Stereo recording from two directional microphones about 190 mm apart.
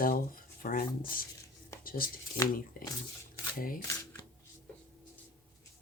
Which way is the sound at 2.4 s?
50° left (ahead or behind).